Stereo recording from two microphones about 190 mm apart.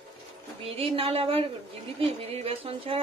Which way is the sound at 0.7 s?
30° right (ahead or behind).